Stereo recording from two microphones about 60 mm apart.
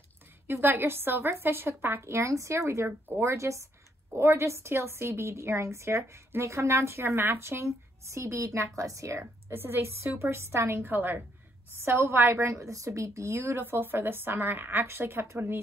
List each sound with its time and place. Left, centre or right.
0.5 s a woman's voice: right
4.1 s a woman's voice: right
9.5 s a woman's voice: right
10.8 s speech: right
12.5 s speech: right